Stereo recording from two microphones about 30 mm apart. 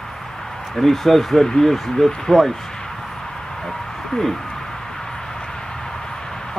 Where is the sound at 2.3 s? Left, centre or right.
Centre.